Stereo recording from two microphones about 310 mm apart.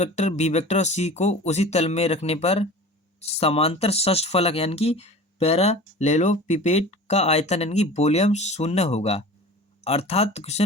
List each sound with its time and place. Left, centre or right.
0.0 s speech: left